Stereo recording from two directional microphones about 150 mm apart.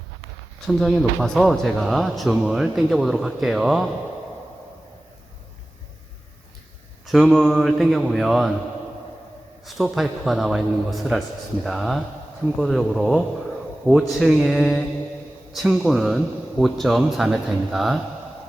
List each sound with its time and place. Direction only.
0.7 s speech: centre (ahead or behind)
7.1 s speech: 5° left (ahead or behind)
9.6 s speech: centre (ahead or behind)